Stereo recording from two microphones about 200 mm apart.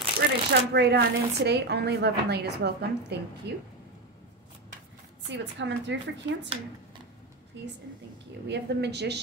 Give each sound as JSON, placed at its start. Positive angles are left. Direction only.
{"t": 0.5, "sound": "speech", "side_deg": -55}
{"t": 5.3, "sound": "speech", "side_deg": -60}
{"t": 7.5, "sound": "speech", "side_deg": -65}